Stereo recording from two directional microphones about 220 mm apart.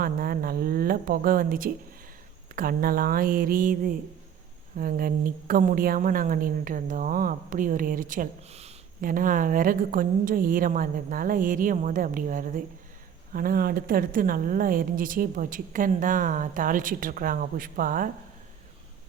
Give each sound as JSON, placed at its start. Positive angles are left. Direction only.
{"t": 0.0, "sound": "a woman's voice", "side_deg": -40}